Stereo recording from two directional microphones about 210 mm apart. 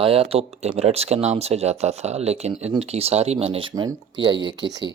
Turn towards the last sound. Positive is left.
turn(degrees=-20)  # may be behind; listen again after turning